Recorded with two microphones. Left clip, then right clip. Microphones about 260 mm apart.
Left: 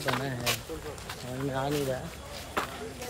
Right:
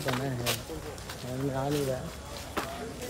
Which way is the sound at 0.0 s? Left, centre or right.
Centre.